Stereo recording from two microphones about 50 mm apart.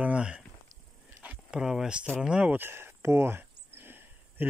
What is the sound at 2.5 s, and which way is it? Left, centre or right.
Speech, right.